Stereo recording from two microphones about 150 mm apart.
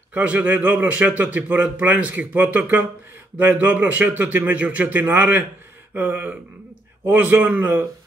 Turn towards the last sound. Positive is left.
turn(degrees=-10)  # may be behind; listen again after turning